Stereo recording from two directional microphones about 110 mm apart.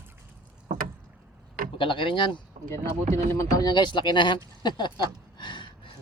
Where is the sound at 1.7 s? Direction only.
50° left (ahead or behind).